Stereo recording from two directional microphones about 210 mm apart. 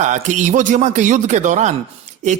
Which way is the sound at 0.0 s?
35° right (ahead or behind).